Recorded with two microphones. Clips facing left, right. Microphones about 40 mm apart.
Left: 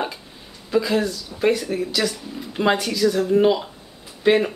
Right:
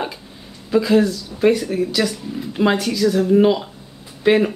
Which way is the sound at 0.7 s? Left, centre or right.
Centre.